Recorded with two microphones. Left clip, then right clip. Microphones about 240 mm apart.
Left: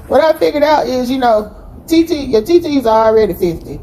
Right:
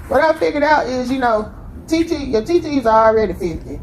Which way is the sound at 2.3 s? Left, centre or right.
Left.